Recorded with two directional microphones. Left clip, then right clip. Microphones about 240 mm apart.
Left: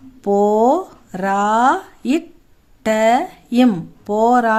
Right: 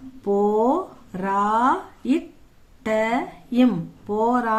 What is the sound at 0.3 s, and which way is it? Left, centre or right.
Speech, left.